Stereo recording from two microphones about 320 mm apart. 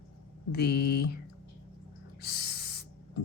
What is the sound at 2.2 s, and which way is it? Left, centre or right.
Owl, left.